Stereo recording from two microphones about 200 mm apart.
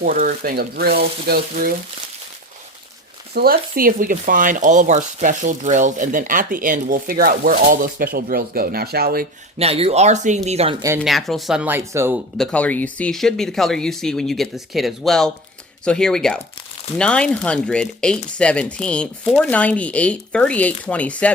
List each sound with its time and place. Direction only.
0.0 s speech: 45° right (ahead or behind)
3.3 s speech: 50° right (ahead or behind)
9.6 s speech: 30° right (ahead or behind)
11.0 s speech: centre (ahead or behind)
12.4 s speech: 5° left (ahead or behind)